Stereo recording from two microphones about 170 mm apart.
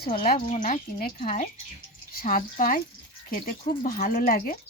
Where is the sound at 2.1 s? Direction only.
55° left (ahead or behind).